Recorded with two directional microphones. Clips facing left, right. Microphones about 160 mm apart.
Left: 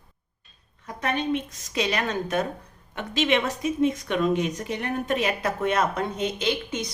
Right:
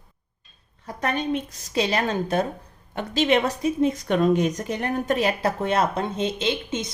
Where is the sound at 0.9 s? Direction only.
40° right (ahead or behind).